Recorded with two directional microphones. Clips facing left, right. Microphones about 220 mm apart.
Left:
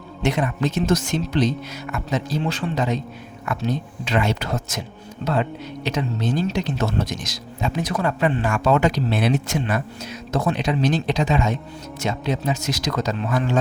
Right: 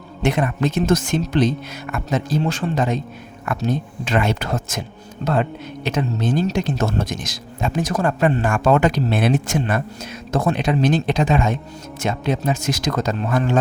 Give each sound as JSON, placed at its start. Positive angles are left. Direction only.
{"t": 0.2, "sound": "speech", "side_deg": -55}